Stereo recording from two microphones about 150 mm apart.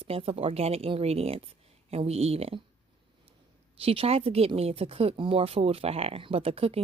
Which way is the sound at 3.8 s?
40° right (ahead or behind).